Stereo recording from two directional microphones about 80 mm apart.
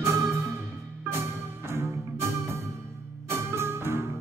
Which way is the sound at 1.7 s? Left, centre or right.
Right.